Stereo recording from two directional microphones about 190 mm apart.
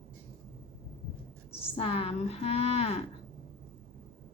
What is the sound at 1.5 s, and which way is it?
Speech, 30° left (ahead or behind).